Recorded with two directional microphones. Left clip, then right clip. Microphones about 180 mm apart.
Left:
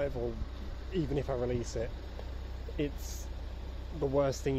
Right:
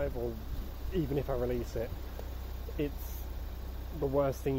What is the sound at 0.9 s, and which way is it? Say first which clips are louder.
Speech: even; 5° left (ahead or behind).